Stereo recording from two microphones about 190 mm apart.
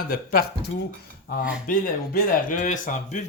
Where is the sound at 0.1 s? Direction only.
50° left (ahead or behind).